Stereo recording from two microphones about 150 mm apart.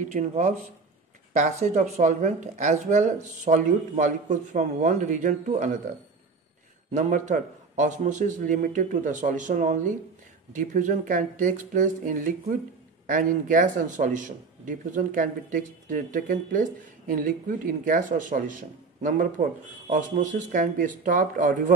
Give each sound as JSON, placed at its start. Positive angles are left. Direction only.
{"t": 0.1, "sound": "speech", "side_deg": -55}
{"t": 6.9, "sound": "speech", "side_deg": -55}